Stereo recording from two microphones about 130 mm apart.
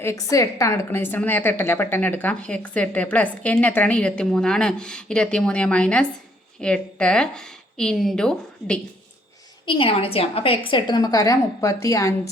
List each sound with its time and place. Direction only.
0.0 s a woman's voice: 25° left (ahead or behind); by 8.8 s 5° left (ahead or behind)
9.6 s a woman's voice: 45° left (ahead or behind); by 12.3 s 25° left (ahead or behind)